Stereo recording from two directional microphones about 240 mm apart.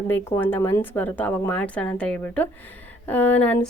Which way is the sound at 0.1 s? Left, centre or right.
Centre.